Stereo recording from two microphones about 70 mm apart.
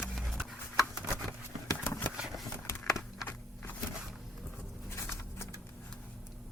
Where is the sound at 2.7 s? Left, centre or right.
Left.